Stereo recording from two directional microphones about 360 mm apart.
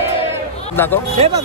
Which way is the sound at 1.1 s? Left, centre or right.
Centre.